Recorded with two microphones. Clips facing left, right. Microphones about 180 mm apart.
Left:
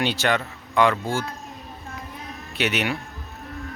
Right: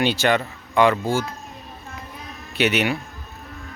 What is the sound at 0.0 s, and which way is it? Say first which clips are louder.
Speech: right 3 dB; centre (ahead or behind).